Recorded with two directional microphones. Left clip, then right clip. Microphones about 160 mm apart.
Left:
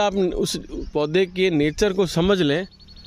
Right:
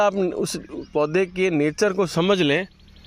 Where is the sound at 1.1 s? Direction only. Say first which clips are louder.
Left 1 dB; 55° left (ahead or behind).